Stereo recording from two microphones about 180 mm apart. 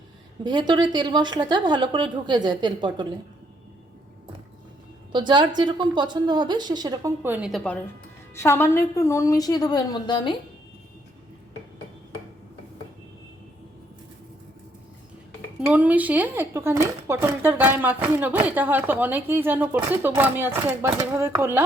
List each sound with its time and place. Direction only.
0.4 s a woman's voice: 25° right (ahead or behind)
5.1 s a woman's voice: 25° right (ahead or behind); by 7.6 s 5° right (ahead or behind)
8.4 s a woman's voice: 15° left (ahead or behind)
15.6 s speech: 5° right (ahead or behind)